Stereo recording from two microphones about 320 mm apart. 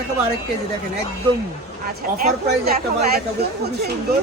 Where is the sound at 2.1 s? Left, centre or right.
Right.